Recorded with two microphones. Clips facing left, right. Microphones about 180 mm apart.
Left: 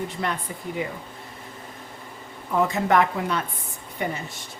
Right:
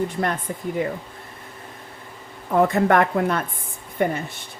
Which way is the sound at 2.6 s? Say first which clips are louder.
Right 3 dB; 55° right (ahead or behind).